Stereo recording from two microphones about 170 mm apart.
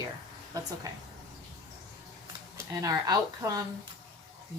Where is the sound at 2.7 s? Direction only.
20° right (ahead or behind).